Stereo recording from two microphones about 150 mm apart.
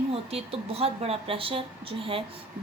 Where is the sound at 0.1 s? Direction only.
40° right (ahead or behind).